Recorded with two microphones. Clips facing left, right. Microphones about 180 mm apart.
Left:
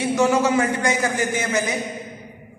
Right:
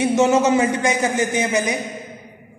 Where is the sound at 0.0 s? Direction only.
20° right (ahead or behind).